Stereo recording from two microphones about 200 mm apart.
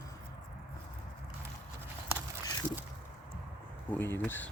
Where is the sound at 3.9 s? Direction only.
10° left (ahead or behind).